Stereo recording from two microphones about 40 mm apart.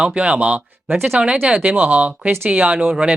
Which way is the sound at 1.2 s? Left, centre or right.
Right.